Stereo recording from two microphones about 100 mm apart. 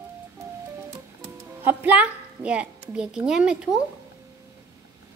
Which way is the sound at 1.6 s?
15° right (ahead or behind).